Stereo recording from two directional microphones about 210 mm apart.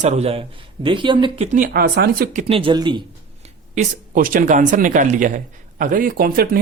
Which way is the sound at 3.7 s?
40° right (ahead or behind).